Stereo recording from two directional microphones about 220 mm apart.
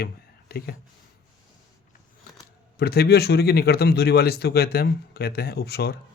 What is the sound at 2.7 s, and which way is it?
Speech, 45° left (ahead or behind).